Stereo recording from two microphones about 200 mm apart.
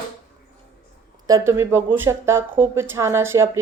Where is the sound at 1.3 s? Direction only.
15° right (ahead or behind).